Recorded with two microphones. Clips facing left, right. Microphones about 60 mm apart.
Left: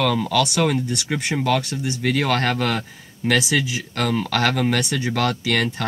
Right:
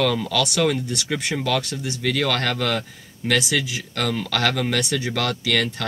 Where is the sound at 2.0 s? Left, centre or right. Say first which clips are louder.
Left 2 dB; left.